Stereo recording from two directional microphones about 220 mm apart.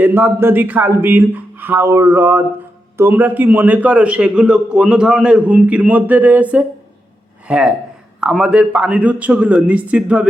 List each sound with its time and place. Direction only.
0.0 s a man's voice: 10° right (ahead or behind)